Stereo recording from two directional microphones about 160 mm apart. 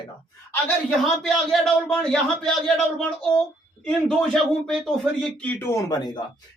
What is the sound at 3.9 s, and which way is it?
A man's voice, 5° left (ahead or behind).